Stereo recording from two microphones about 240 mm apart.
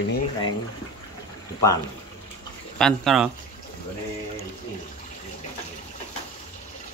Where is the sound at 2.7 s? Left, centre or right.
Centre.